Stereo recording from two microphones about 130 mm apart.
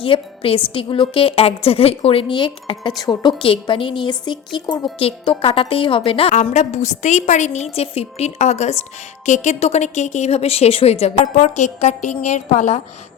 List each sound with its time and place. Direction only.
0.0 s a woman's voice: 45° left (ahead or behind)
5.4 s a woman's voice: 45° left (ahead or behind)
6.3 s a woman's voice: 65° left (ahead or behind)